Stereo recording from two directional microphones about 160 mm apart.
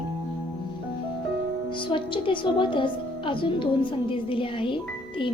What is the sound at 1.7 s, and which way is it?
A woman's voice, 30° left (ahead or behind).